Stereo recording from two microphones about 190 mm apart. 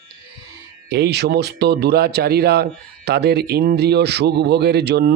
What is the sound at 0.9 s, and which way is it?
Speech, 60° right (ahead or behind).